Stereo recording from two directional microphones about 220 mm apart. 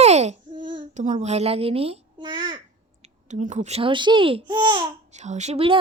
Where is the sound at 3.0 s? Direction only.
35° right (ahead or behind).